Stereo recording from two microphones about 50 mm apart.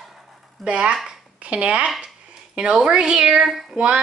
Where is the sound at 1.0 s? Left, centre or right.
Right.